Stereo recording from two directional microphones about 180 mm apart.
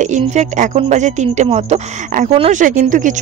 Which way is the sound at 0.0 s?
40° right (ahead or behind).